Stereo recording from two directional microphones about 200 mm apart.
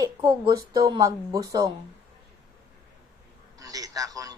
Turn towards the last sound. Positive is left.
turn(degrees=-20)  # may be behind; listen again after turning